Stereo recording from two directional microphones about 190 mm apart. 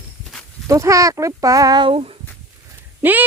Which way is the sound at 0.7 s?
15° right (ahead or behind).